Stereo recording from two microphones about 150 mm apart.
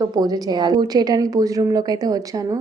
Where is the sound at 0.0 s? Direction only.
25° right (ahead or behind).